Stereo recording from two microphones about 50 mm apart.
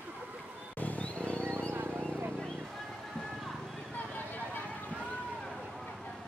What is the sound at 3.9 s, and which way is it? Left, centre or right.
Vehicle, left.